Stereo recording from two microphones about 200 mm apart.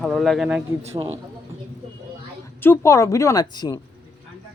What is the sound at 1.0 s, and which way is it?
Speech, 20° right (ahead or behind).